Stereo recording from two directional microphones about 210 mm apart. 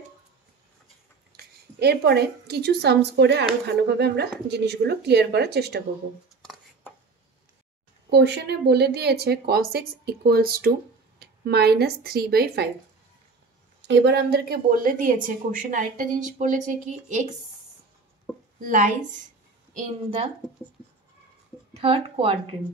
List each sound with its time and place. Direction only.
1.3 s a woman's voice: 50° right (ahead or behind)
8.1 s a woman's voice: 55° right (ahead or behind)
13.8 s a woman's voice: 55° right (ahead or behind); by 17.3 s 35° right (ahead or behind)
18.6 s a woman's voice: 40° right (ahead or behind)
21.7 s speech: 25° right (ahead or behind)